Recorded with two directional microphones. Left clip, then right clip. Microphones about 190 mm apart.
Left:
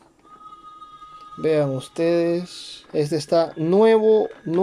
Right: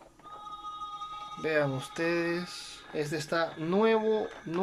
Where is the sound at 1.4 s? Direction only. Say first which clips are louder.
Left 9 dB; 25° left (ahead or behind).